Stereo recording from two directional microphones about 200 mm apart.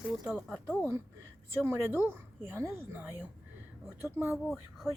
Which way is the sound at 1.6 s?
10° right (ahead or behind).